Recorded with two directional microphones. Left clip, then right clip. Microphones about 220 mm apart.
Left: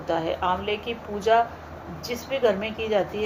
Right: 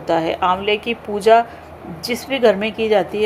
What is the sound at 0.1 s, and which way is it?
A woman's voice, 45° right (ahead or behind).